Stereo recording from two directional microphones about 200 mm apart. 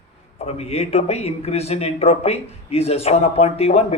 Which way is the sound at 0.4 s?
30° left (ahead or behind).